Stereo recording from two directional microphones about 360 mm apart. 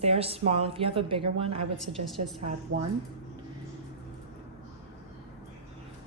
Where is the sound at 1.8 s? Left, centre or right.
Centre.